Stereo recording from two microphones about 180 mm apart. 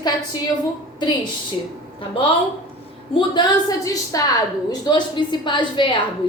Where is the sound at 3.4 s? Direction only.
20° left (ahead or behind).